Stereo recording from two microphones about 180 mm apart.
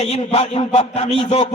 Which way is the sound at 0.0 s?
35° left (ahead or behind).